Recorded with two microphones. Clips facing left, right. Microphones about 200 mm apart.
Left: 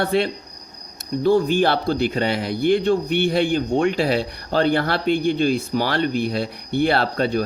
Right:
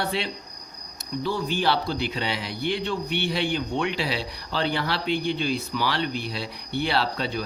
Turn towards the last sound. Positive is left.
turn(degrees=50)  # may be behind; listen again after turning